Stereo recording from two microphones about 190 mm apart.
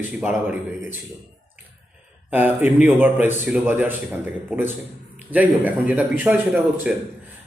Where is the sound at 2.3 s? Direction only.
10° right (ahead or behind).